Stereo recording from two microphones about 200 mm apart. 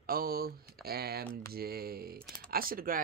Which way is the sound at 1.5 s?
50° right (ahead or behind).